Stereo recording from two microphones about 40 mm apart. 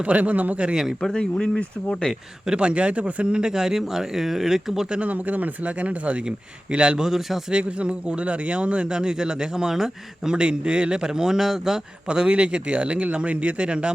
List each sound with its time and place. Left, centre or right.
0.0 s speech: right
1.1 s speech: left
2.5 s speech: right
4.9 s speech: right
6.2 s a man's voice: right
7.0 s speech: centre
7.5 s a man's voice: right
10.3 s speech: right
12.0 s a man's voice: right